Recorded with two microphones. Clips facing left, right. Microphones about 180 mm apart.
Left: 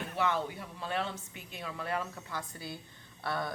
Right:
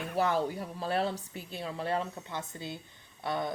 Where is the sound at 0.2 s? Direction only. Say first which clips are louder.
Right 4 dB; 40° right (ahead or behind).